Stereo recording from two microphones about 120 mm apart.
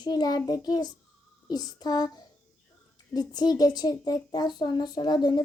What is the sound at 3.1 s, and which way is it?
A woman's voice, 35° left (ahead or behind).